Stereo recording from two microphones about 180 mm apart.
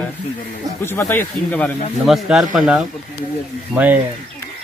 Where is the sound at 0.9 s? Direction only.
10° left (ahead or behind).